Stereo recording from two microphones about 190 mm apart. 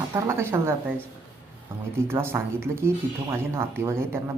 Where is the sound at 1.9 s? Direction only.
15° right (ahead or behind).